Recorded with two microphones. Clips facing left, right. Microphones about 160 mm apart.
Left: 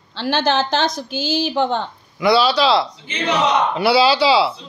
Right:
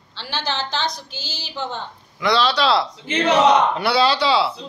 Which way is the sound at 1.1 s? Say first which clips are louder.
Left 13 dB; 55° left (ahead or behind).